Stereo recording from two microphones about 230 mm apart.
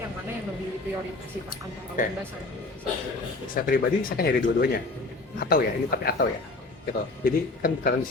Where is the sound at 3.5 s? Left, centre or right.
Left.